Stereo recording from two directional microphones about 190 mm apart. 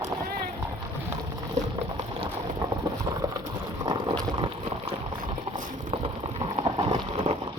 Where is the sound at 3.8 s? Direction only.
20° right (ahead or behind).